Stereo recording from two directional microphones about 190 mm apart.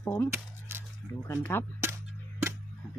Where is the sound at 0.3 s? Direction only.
10° right (ahead or behind).